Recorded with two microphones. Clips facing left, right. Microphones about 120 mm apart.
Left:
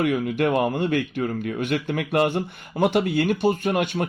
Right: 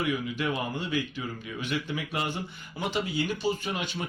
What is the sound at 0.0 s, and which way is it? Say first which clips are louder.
Speech: left 8 dB; 55° left (ahead or behind).